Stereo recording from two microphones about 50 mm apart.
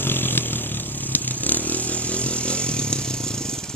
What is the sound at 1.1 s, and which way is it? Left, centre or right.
Motorcycle, left.